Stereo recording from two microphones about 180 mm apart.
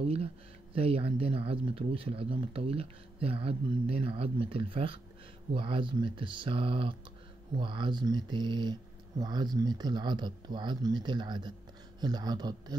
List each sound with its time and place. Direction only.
0.0 s speech: 35° right (ahead or behind)